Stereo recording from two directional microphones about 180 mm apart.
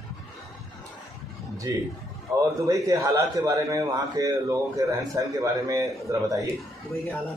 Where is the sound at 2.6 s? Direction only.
20° right (ahead or behind).